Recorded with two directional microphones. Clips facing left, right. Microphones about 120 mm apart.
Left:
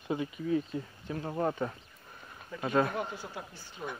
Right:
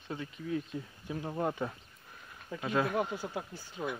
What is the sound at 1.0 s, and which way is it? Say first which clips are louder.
Speech: left 2 dB; 10° right (ahead or behind).